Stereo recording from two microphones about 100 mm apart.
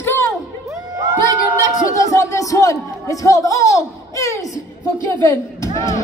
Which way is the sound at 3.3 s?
35° left (ahead or behind).